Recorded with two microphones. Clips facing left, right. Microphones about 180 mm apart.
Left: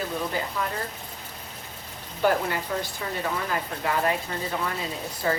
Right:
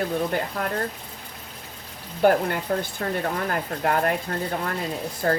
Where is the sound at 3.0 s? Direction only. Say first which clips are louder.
Right 3 dB; 55° right (ahead or behind).